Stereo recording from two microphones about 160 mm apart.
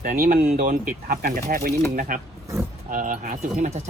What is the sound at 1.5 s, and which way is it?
Speech, 75° right (ahead or behind).